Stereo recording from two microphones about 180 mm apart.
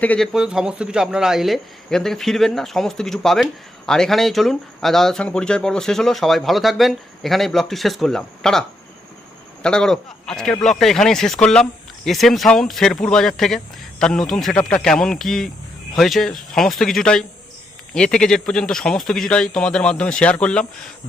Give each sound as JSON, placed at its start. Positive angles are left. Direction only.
{"t": 0.0, "sound": "speech", "side_deg": 10}
{"t": 0.3, "sound": "speech", "side_deg": -5}
{"t": 9.6, "sound": "speech", "side_deg": 5}